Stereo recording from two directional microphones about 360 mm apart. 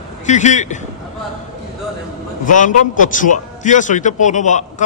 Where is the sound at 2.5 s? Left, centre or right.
Left.